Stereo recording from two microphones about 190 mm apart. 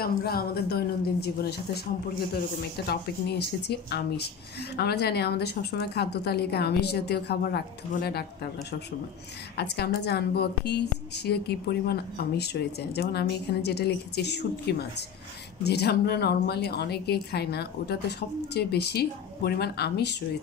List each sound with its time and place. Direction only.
0.0 s a woman's voice: 55° left (ahead or behind)
2.9 s a woman's voice: 60° left (ahead or behind)
9.6 s a woman's voice: 60° left (ahead or behind)